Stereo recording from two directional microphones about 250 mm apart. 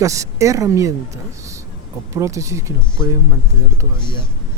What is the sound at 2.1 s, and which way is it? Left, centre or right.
Speech, centre.